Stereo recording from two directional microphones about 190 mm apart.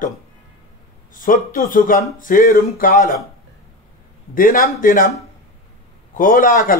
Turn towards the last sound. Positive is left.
turn(degrees=45)  # may be behind; listen again after turning